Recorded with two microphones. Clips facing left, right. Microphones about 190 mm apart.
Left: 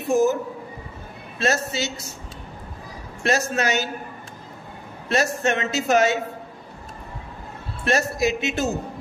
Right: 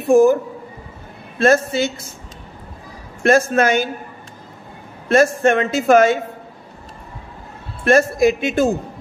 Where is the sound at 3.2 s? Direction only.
50° right (ahead or behind).